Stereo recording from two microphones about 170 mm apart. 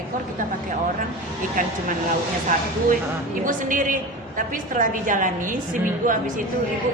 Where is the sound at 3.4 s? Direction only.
50° right (ahead or behind).